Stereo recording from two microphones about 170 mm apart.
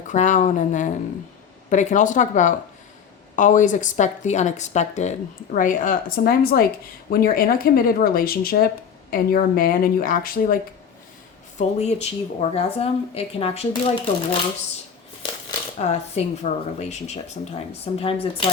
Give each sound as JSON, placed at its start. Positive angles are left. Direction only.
{"t": 0.1, "sound": "speech", "side_deg": 45}
{"t": 11.5, "sound": "speech", "side_deg": 40}
{"t": 15.8, "sound": "speech", "side_deg": 40}